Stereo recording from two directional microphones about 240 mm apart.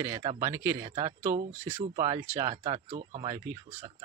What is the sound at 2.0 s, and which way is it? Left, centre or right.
Speech, centre.